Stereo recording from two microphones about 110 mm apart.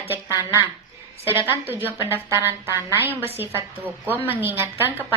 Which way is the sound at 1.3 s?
20° right (ahead or behind).